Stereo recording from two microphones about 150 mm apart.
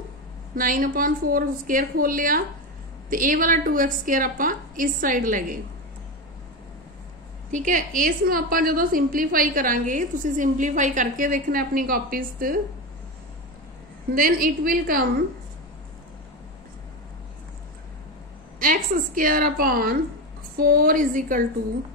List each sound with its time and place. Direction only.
0.6 s a woman's voice: 65° right (ahead or behind)
7.5 s a woman's voice: 60° right (ahead or behind)
14.1 s a woman's voice: 70° right (ahead or behind)
18.6 s a woman's voice: 65° right (ahead or behind)